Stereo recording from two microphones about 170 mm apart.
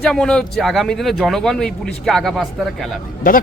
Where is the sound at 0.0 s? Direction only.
5° left (ahead or behind).